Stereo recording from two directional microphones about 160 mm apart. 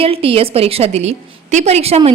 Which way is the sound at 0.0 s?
35° right (ahead or behind).